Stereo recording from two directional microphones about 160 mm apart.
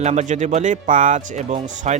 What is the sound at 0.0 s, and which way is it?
Speech, 45° right (ahead or behind).